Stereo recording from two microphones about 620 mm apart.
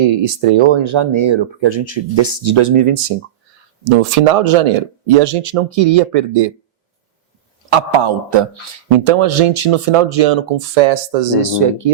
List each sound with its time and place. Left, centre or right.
0.0 s speech: right
4.1 s speech: right
7.7 s speech: right
9.0 s speech: right
10.8 s speech: right